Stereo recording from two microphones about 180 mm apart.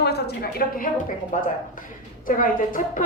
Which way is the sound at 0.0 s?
60° left (ahead or behind).